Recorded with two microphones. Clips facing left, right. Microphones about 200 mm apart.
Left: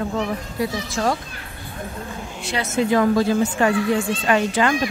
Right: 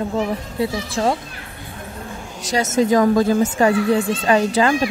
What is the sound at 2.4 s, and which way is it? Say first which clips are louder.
Speech: right 4 dB; 40° right (ahead or behind).